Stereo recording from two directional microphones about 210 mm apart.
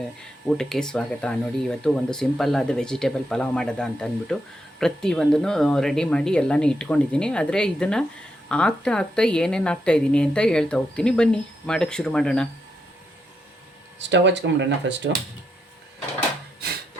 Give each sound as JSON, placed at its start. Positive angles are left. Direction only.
{"t": 0.5, "sound": "a woman's voice", "side_deg": 5}
{"t": 14.0, "sound": "speech", "side_deg": -60}